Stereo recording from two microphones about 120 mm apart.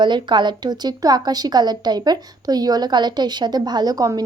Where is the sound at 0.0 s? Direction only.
40° right (ahead or behind).